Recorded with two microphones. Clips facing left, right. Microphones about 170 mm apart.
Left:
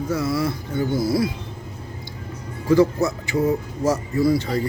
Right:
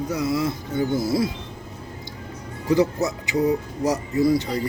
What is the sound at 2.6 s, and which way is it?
Speech, 20° right (ahead or behind).